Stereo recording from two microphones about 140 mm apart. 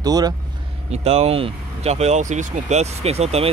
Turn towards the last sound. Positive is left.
turn(degrees=-50)  # may be behind; listen again after turning